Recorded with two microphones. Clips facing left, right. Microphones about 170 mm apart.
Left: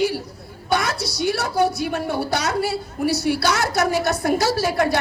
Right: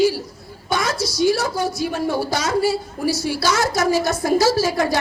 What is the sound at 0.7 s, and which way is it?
A woman's voice, 65° left (ahead or behind).